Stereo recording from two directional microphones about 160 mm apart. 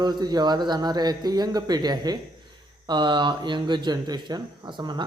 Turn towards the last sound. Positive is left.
turn(degrees=-25)  # may be behind; listen again after turning